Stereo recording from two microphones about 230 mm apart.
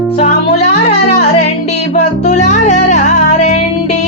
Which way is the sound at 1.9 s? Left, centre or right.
Left.